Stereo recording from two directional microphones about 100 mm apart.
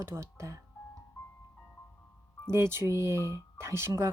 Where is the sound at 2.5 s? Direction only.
25° right (ahead or behind).